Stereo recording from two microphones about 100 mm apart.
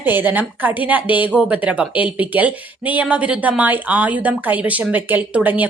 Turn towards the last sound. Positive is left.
turn(degrees=-15)  # may be behind; listen again after turning